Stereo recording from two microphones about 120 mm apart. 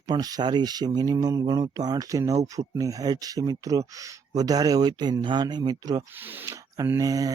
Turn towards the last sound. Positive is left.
turn(degrees=-30)  # may be behind; listen again after turning